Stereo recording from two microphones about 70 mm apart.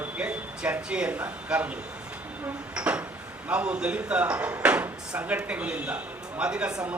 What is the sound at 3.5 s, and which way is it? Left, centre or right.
A man's voice, centre.